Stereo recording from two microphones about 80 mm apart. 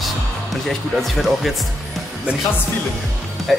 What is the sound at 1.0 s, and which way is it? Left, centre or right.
Speech, centre.